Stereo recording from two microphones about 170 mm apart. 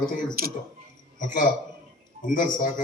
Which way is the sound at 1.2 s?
50° left (ahead or behind).